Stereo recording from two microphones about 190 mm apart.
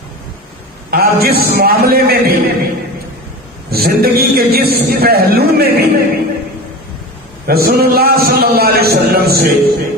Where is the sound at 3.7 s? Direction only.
55° right (ahead or behind).